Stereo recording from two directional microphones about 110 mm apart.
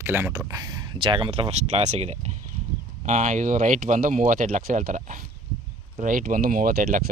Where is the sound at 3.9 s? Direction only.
90° right.